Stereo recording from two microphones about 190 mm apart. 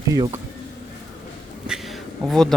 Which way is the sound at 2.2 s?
Centre (ahead or behind).